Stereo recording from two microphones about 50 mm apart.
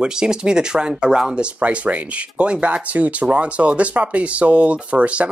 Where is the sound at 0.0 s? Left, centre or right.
Centre.